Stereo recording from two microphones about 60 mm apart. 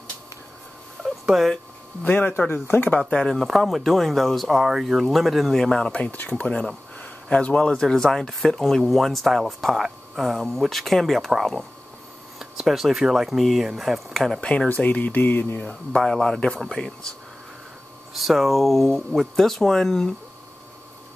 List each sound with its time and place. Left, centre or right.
1.0 s cat: centre
2.0 s speech: left
3.0 s speech: centre
3.3 s speech: centre
14.4 s speech: centre
14.7 s speech: left
15.9 s speech: centre
18.1 s speech: centre